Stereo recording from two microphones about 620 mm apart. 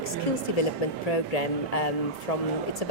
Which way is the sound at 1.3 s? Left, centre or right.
Left.